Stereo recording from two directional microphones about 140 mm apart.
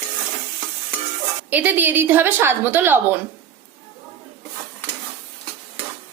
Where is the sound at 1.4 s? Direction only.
15° right (ahead or behind).